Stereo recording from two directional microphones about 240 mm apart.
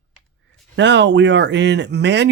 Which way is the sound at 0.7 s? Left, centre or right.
Right.